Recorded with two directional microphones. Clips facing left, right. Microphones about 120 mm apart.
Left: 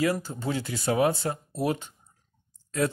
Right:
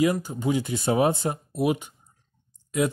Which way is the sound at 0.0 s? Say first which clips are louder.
Right 4 dB; 15° right (ahead or behind).